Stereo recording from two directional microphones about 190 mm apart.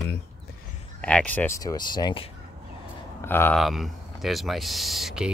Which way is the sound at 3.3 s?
10° left (ahead or behind).